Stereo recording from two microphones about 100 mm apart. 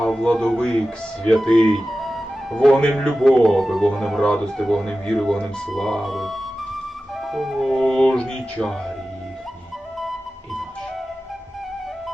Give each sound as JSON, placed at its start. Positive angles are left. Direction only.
{"t": 0.0, "sound": "speech", "side_deg": 5}